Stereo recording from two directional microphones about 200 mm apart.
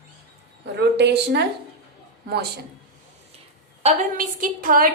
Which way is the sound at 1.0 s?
60° right (ahead or behind).